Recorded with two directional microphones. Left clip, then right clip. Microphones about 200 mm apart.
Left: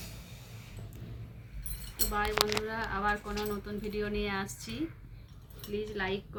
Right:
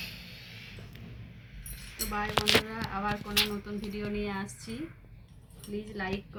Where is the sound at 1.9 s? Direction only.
20° left (ahead or behind).